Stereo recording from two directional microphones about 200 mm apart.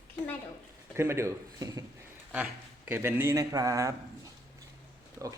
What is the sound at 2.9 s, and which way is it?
Speech, 10° right (ahead or behind).